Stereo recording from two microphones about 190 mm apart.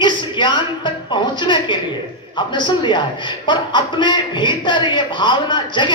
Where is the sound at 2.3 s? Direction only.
25° left (ahead or behind).